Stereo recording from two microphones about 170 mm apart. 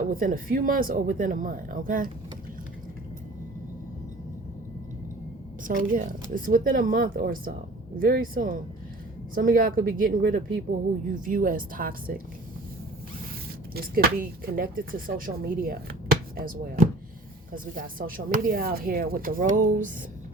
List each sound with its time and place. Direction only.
0.1 s speech: 55° right (ahead or behind)
5.6 s speech: 50° right (ahead or behind)
13.7 s speech: 60° right (ahead or behind)